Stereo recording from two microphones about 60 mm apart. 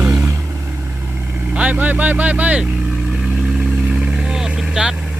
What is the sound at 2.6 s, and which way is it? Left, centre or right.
Vehicle, centre.